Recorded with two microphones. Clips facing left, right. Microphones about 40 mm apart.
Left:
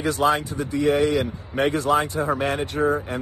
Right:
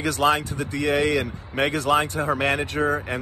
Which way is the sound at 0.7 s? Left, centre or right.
Right.